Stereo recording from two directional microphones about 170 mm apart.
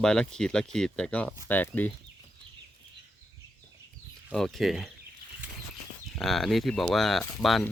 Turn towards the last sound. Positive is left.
turn(degrees=0)  # may be behind; listen again after turning